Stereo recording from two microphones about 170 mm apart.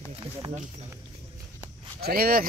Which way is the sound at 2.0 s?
60° right (ahead or behind).